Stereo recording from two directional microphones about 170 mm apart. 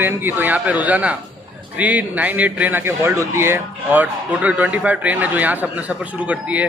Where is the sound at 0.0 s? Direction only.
10° right (ahead or behind).